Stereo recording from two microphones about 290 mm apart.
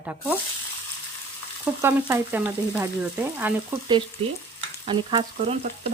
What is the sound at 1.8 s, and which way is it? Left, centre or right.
Frying, centre.